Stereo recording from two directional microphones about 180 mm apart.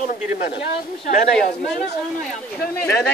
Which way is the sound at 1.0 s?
45° left (ahead or behind).